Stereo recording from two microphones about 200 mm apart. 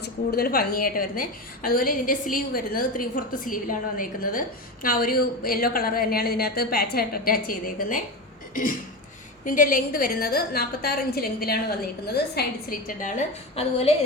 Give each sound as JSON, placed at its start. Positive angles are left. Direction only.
{"t": 0.0, "sound": "a woman's voice", "side_deg": 50}
{"t": 9.4, "sound": "a woman's voice", "side_deg": 40}